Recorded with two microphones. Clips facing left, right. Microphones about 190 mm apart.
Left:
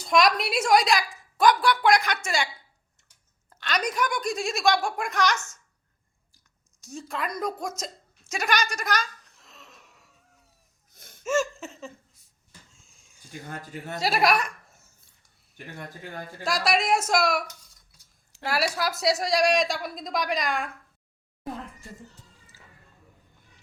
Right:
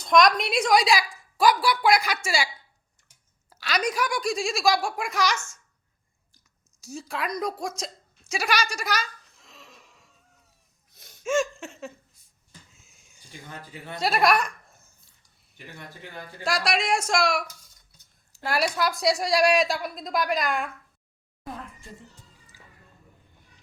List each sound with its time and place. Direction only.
0.0 s a woman's voice: 5° left (ahead or behind)
3.5 s a woman's voice: 5° right (ahead or behind)
6.8 s a woman's voice: centre (ahead or behind)
8.3 s a sound: centre (ahead or behind)
10.9 s gasp: 50° left (ahead or behind)
11.2 s laughter: 5° left (ahead or behind)
12.7 s a sound: 5° right (ahead or behind)
13.5 s speech: 45° left (ahead or behind)
14.0 s speech: centre (ahead or behind)
16.4 s a woman's voice: centre (ahead or behind)
18.4 s a woman's voice: 5° left (ahead or behind)